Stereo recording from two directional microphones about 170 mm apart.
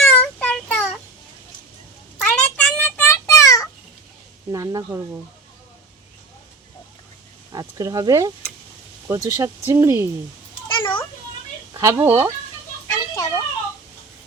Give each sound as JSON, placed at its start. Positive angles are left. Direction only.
{"t": 0.0, "sound": "child singing", "side_deg": 5}
{"t": 2.2, "sound": "child singing", "side_deg": 5}
{"t": 4.5, "sound": "speech", "side_deg": -20}
{"t": 7.5, "sound": "speech", "side_deg": -20}
{"t": 10.7, "sound": "cat", "side_deg": 30}
{"t": 11.7, "sound": "speech", "side_deg": -15}
{"t": 12.9, "sound": "children playing", "side_deg": 20}